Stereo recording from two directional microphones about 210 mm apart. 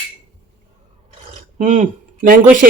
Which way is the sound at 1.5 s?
35° right (ahead or behind).